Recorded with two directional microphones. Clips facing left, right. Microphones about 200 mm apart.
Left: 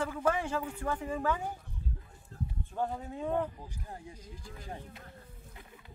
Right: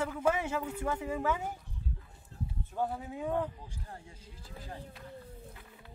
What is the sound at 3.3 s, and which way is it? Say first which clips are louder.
Speech: left 1 dB; 15° left (ahead or behind).